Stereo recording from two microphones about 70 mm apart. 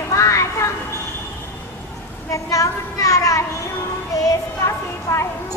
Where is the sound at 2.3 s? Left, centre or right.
Left.